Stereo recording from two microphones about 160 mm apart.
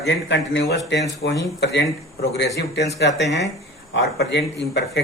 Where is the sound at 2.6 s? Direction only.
90° left.